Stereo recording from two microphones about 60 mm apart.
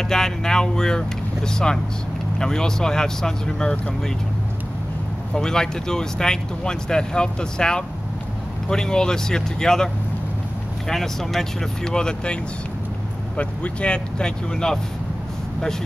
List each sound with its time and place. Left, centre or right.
0.1 s speech: centre
5.3 s speech: centre
10.9 s speech: centre
13.4 s speech: left